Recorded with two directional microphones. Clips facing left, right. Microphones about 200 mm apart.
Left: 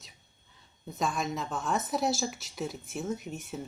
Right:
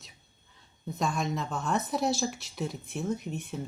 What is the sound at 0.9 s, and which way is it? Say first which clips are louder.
Speech: right 1 dB; centre (ahead or behind).